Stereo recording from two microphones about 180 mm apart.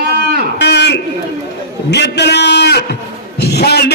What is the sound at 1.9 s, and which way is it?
A man's voice, 70° left (ahead or behind).